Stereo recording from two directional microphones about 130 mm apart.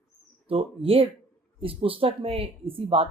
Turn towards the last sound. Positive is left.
turn(degrees=-45)  # may be behind; listen again after turning